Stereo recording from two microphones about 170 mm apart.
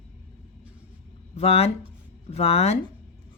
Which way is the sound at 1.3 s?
35° left (ahead or behind).